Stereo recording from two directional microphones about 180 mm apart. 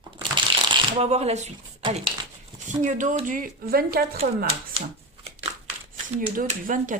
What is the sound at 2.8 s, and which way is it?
Speech, 45° right (ahead or behind).